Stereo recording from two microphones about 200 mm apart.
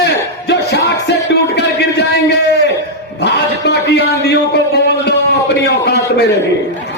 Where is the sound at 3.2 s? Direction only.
60° left (ahead or behind).